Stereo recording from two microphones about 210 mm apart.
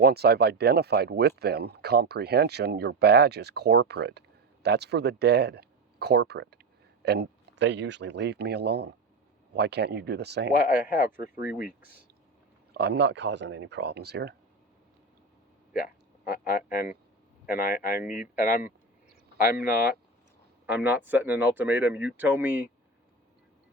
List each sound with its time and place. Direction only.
0.0 s speech: 50° right (ahead or behind)
10.9 s speech: 45° left (ahead or behind)
11.6 s speech: 10° right (ahead or behind)
12.7 s speech: 55° right (ahead or behind)
16.2 s speech: 45° left (ahead or behind)
18.0 s speech: 5° right (ahead or behind)
18.3 s speech: 40° left (ahead or behind)
20.7 s speech: 5° right (ahead or behind)